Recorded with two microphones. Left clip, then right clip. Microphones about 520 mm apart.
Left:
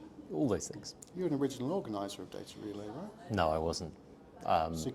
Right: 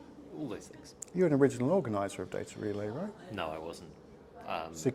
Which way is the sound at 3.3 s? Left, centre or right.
Left.